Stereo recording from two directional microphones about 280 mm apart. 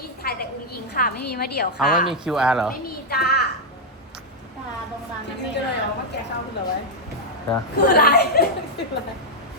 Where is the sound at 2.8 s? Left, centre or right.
Left.